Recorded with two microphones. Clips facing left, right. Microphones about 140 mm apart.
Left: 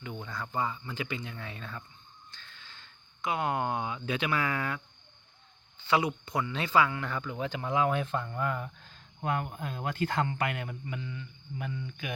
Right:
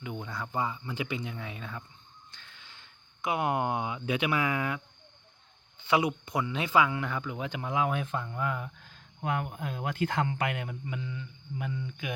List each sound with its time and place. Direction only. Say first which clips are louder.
0.0 s speech: right 2 dB; 15° right (ahead or behind)
5.9 s speech: right 1 dB; 15° right (ahead or behind)